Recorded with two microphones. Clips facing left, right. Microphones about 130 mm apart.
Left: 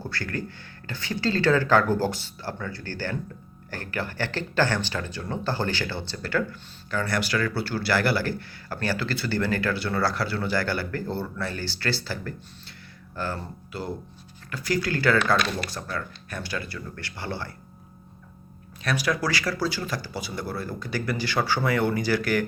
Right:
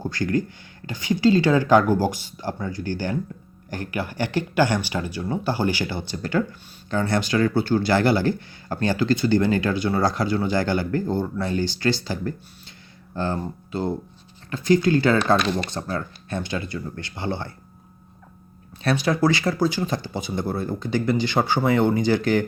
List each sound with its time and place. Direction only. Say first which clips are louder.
0.0 s speech: right 8 dB; 15° right (ahead or behind)
18.8 s speech: right 6 dB; 25° right (ahead or behind)